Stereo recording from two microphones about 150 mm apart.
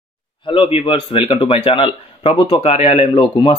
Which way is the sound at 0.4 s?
40° left (ahead or behind).